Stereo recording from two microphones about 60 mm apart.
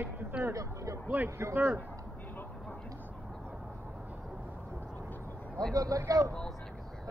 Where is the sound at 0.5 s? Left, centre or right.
Right.